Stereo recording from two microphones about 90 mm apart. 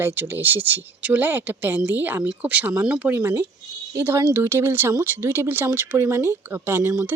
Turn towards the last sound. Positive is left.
turn(degrees=-20)  # may be behind; listen again after turning